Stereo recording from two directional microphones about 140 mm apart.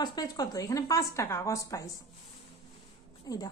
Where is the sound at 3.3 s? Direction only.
25° left (ahead or behind).